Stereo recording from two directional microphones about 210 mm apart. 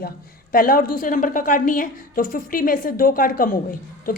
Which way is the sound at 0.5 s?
40° left (ahead or behind).